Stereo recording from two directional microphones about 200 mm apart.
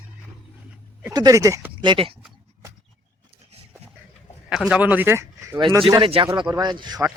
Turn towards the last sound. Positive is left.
turn(degrees=-20)  # may be behind; listen again after turning